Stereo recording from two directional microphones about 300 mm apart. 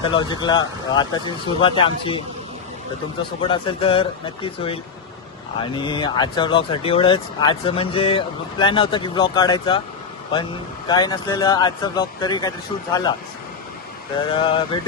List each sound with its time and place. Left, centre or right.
0.0 s speech: centre
3.4 s speech: centre
10.8 s speech: centre
14.3 s speech: centre